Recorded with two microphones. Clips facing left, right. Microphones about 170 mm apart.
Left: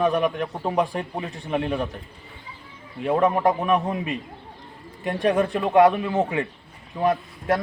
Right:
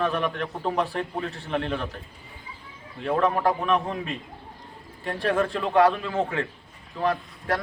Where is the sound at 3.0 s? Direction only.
20° left (ahead or behind).